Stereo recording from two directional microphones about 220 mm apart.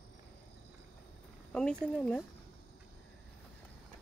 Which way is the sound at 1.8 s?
5° left (ahead or behind).